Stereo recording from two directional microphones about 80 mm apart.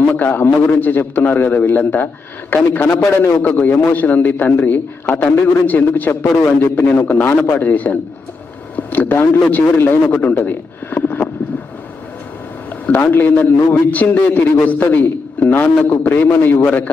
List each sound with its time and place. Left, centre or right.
0.0 s a man's voice: left
12.8 s a man's voice: left